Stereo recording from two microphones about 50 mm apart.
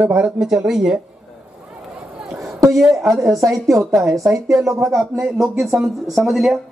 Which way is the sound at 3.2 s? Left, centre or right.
Right.